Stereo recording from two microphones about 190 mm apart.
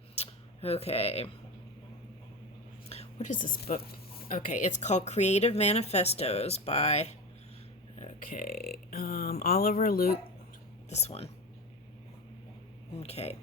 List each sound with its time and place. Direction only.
0.2 s a sound: 30° left (ahead or behind)
2.9 s a woman's voice: 35° left (ahead or behind); by 10.2 s 50° left (ahead or behind)
10.8 s speech: 35° left (ahead or behind)
13.0 s speech: 35° left (ahead or behind)